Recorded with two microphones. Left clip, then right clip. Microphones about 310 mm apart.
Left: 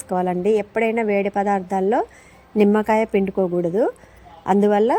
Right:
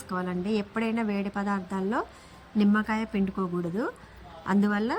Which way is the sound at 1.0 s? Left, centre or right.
Right.